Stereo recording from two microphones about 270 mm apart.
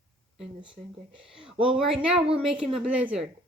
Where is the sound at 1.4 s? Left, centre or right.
Centre.